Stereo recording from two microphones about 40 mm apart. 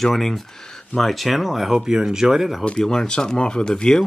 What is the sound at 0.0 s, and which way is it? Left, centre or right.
Speech, centre.